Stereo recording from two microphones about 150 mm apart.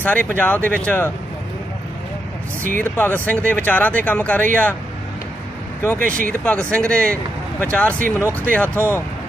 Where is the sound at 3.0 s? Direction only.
10° left (ahead or behind).